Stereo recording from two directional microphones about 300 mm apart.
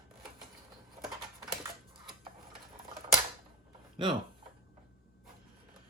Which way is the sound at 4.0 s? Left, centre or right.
Centre.